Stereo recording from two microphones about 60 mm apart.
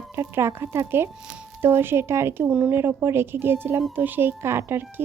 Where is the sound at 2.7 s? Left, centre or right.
Right.